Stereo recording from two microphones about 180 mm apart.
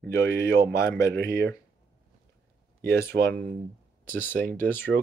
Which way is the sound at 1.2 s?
60° right (ahead or behind).